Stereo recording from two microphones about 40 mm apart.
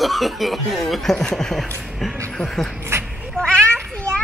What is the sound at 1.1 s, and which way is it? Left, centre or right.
Speech, centre.